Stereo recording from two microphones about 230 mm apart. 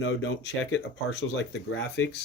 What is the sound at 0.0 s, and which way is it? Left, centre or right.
Speech, left.